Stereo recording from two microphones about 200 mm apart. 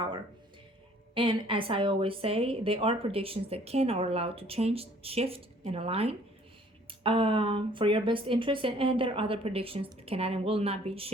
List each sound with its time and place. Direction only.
1.1 s a woman's voice: 25° right (ahead or behind)